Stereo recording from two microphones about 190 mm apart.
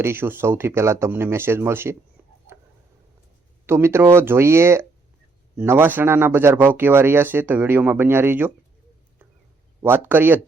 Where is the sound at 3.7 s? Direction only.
15° right (ahead or behind).